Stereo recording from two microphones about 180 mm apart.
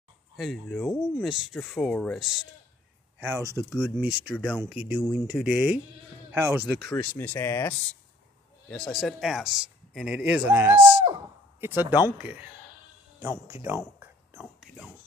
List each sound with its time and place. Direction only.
0.4 s a man's voice: centre (ahead or behind)
3.2 s a man's voice: 15° right (ahead or behind)
7.0 s a man's voice: 10° left (ahead or behind); by 10.8 s 10° right (ahead or behind)
10.8 s speech: 30° right (ahead or behind)
11.6 s speech: 10° right (ahead or behind)
13.5 s a sound: 15° right (ahead or behind)